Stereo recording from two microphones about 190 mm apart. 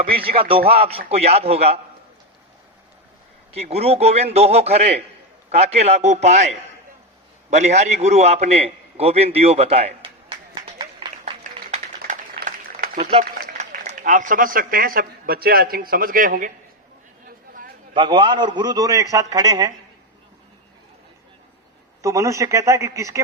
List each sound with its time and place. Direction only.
0.2 s a man's voice: 30° right (ahead or behind)
3.5 s a man's voice: 35° right (ahead or behind)
7.5 s a sound: 35° right (ahead or behind)
11.7 s a sound: 40° right (ahead or behind)
13.4 s a man's voice: 45° right (ahead or behind)
17.9 s a man's voice: 25° right (ahead or behind)
22.0 s speech: 15° right (ahead or behind)